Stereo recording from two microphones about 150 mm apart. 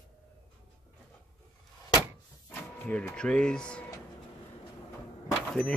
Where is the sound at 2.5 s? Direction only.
10° left (ahead or behind).